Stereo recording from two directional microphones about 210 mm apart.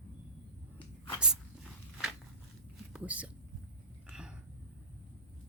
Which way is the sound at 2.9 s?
5° right (ahead or behind).